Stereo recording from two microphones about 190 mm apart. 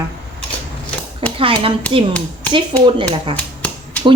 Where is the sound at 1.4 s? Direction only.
30° right (ahead or behind).